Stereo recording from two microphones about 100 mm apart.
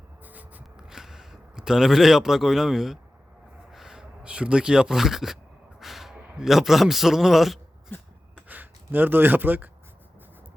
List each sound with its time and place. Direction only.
0.3 s a sound: 15° right (ahead or behind)
3.7 s a man's voice: 5° right (ahead or behind)
8.4 s speech: 20° right (ahead or behind)